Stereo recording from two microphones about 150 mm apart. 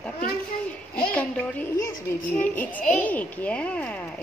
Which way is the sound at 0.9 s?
10° left (ahead or behind).